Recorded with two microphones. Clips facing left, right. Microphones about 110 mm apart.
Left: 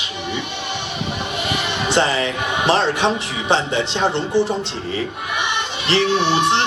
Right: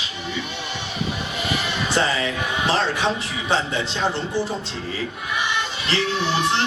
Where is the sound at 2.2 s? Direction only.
70° left (ahead or behind).